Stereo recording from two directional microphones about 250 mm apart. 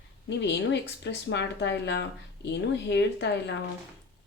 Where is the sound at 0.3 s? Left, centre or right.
Left.